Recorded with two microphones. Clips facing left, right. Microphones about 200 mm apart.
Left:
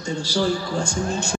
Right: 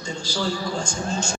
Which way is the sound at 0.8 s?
60° left (ahead or behind).